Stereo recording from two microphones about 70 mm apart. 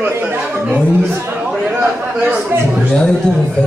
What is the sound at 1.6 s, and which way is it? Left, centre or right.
Speech, centre.